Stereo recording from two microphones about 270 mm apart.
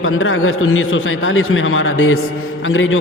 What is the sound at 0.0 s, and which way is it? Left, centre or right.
A man's voice, left.